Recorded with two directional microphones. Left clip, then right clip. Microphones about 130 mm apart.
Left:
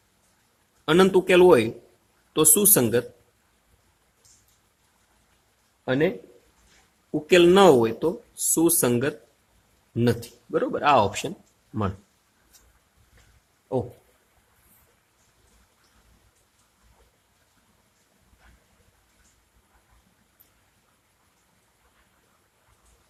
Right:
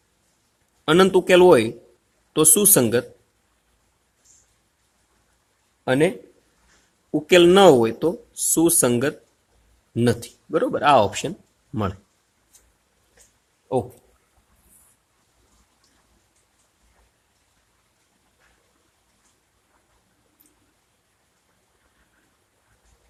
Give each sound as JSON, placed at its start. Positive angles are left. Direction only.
{"t": 0.9, "sound": "speech", "side_deg": -35}
{"t": 5.8, "sound": "a man's voice", "side_deg": -55}
{"t": 7.1, "sound": "speech", "side_deg": -40}